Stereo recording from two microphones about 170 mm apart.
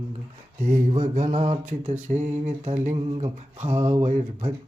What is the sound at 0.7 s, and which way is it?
Mantra, 45° right (ahead or behind).